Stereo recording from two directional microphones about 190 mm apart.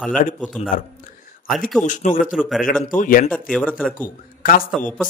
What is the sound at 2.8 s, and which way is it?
Speech, 45° left (ahead or behind).